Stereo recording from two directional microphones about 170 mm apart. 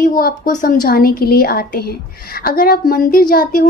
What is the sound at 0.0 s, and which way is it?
A woman's voice, 55° left (ahead or behind).